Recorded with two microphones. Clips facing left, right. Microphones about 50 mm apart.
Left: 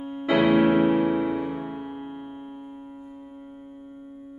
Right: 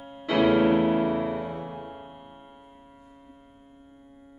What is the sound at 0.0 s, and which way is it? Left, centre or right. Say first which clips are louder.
Music: left 2 dB; centre.